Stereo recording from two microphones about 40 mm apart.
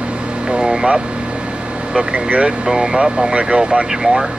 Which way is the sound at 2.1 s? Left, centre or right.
Right.